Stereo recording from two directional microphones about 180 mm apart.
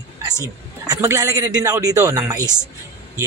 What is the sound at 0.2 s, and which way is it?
A man's voice, 20° right (ahead or behind).